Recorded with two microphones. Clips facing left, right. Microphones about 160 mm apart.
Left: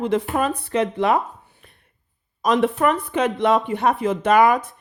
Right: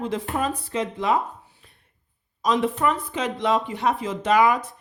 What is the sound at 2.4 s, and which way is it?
Speech, 60° left (ahead or behind).